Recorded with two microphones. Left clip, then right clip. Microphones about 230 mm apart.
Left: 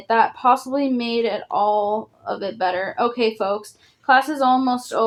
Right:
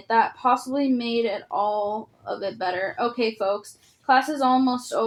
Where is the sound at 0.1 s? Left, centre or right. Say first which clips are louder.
Left 4 dB; left.